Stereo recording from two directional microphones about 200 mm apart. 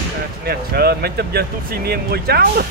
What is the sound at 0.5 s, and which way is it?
Speech, 50° right (ahead or behind).